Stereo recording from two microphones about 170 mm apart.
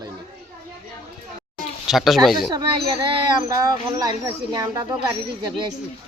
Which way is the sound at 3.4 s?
20° right (ahead or behind).